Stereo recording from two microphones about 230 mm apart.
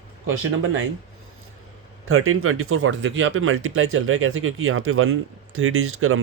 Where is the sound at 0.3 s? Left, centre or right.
Right.